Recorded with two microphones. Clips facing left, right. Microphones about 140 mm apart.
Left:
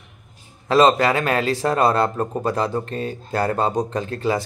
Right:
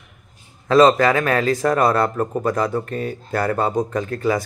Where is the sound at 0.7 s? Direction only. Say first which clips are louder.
Right 2 dB; 20° left (ahead or behind).